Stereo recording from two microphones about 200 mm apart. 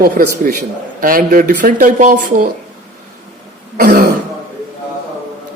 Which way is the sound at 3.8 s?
50° right (ahead or behind).